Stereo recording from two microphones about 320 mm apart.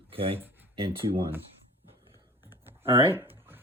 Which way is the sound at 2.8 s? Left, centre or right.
Centre.